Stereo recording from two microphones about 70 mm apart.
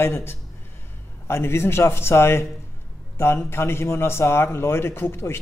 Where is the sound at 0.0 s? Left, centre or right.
Left.